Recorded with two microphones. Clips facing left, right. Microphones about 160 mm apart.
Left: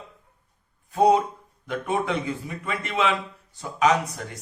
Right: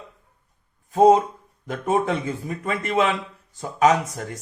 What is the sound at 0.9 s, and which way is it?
A man's voice, 40° right (ahead or behind).